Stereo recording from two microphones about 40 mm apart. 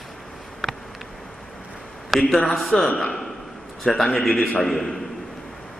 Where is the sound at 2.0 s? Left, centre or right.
Centre.